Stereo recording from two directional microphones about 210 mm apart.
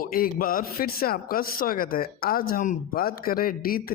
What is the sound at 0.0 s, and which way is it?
Speech, 45° left (ahead or behind).